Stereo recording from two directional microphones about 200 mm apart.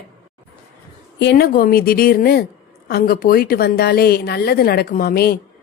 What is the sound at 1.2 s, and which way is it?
A woman's voice, 50° left (ahead or behind).